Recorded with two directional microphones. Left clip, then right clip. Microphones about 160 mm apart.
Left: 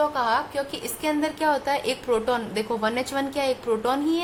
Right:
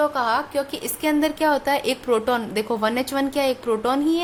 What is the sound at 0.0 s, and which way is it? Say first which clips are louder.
A woman's voice: right 2 dB; 35° right (ahead or behind).